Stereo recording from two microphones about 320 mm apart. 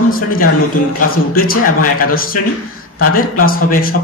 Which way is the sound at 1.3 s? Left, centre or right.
Left.